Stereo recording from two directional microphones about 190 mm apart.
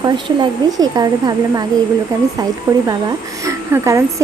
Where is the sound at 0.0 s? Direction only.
25° right (ahead or behind).